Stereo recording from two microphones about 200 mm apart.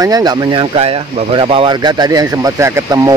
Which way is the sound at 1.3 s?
25° right (ahead or behind).